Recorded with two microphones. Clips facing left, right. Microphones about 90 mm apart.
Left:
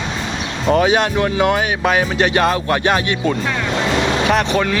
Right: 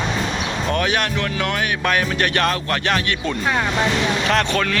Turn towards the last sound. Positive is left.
turn(degrees=10)  # may be behind; listen again after turning